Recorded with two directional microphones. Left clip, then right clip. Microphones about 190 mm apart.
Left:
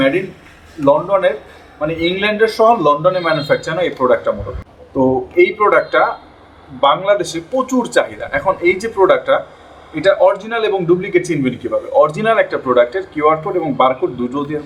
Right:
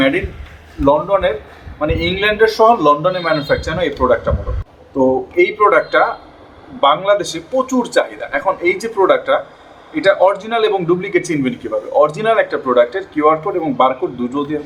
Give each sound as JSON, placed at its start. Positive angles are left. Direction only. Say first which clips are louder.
{"t": 0.9, "sound": "a man's voice", "louder": "left 1 dB", "side_deg": -5}